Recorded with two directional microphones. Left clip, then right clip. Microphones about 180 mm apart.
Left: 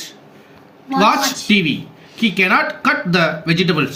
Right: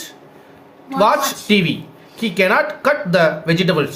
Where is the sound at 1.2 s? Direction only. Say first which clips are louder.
Left 1 dB; 45° right (ahead or behind).